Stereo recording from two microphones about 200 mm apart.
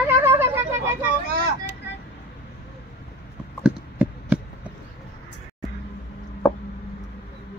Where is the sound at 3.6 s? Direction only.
5° right (ahead or behind).